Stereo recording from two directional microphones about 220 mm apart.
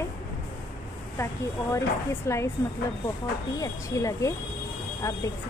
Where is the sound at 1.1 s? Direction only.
10° left (ahead or behind).